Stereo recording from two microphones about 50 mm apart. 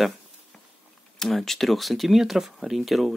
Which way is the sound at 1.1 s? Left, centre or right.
Centre.